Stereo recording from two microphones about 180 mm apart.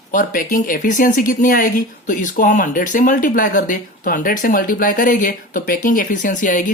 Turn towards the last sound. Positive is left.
turn(degrees=45)  # may be behind; listen again after turning